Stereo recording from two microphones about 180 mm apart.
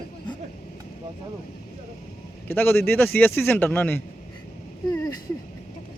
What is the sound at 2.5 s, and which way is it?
A man's voice, 10° left (ahead or behind).